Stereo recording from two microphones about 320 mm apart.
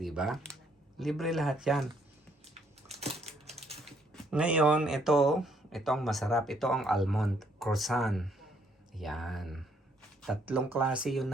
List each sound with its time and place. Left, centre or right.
0.0 s speech: centre
2.9 s typewriter: centre
3.8 s speech: centre